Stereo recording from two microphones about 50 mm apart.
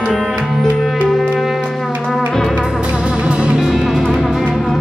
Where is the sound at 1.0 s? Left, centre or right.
Centre.